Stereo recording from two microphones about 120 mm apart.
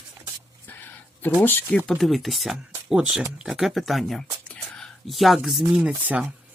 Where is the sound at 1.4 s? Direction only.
15° left (ahead or behind).